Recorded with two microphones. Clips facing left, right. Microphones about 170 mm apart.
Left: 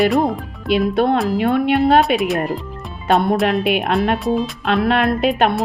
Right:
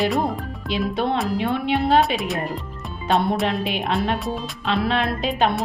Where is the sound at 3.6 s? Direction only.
65° left (ahead or behind).